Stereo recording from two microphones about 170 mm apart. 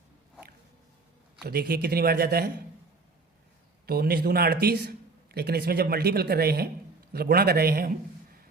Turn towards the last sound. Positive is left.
turn(degrees=-60)  # may be behind; listen again after turning